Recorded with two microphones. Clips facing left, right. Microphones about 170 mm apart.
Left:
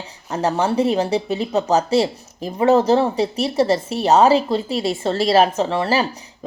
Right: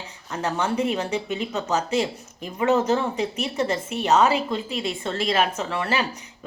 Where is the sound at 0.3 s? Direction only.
35° left (ahead or behind).